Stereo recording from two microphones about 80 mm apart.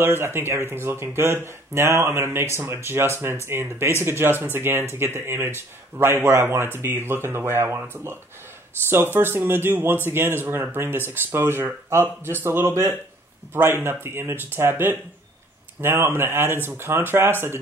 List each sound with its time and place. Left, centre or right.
0.0 s speech: right